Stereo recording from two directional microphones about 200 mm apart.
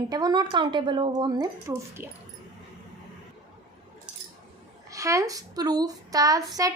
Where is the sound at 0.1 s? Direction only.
20° right (ahead or behind).